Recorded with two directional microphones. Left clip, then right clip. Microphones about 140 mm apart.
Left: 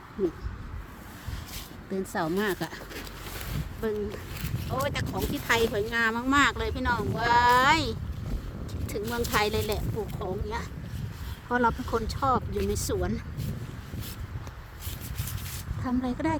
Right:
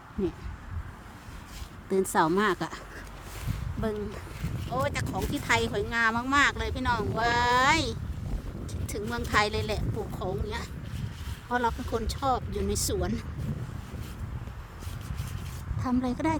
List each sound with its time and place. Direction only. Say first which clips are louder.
1.9 s speech: right 6 dB; 60° right (ahead or behind)
2.4 s speech: right 3 dB; 35° right (ahead or behind)
4.8 s speech: even; 25° right (ahead or behind); by 13.2 s 40° right (ahead or behind)
15.8 s speech: right 1 dB; 45° right (ahead or behind)